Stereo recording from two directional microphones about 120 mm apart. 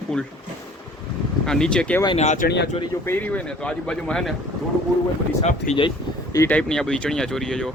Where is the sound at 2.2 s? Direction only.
75° left (ahead or behind).